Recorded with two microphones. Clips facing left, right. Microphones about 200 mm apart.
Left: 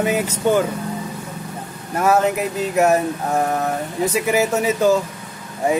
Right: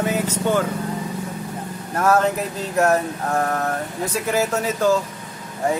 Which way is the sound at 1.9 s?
10° left (ahead or behind).